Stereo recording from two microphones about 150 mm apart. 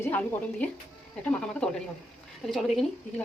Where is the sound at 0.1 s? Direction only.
10° left (ahead or behind).